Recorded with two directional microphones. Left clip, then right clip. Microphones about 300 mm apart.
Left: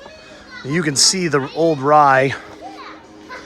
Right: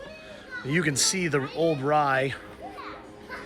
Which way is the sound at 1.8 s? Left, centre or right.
Centre.